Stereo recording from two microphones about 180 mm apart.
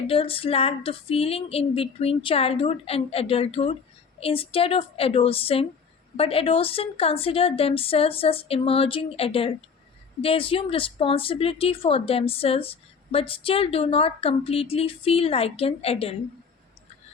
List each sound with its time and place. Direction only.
0.1 s a woman's voice: 30° left (ahead or behind)